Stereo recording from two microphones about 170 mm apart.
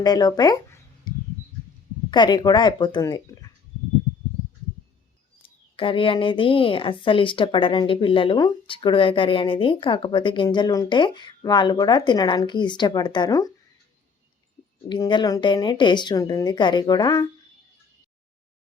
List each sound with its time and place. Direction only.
0.0 s speech: 20° left (ahead or behind)
5.4 s a woman's voice: 30° left (ahead or behind)
14.8 s a woman's voice: 25° left (ahead or behind)